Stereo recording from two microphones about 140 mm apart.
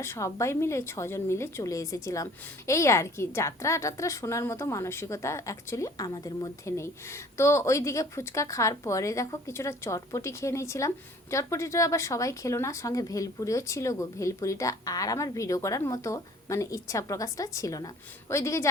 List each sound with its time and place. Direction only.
0.0 s a woman's voice: 20° left (ahead or behind)